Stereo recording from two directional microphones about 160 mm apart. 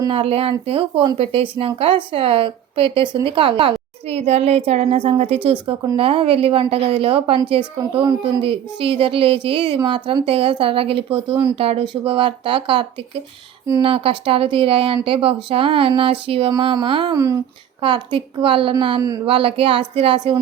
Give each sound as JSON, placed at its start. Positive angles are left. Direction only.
{"t": 0.1, "sound": "speech", "side_deg": -35}
{"t": 13.7, "sound": "speech", "side_deg": -20}
{"t": 13.9, "sound": "speech", "side_deg": -35}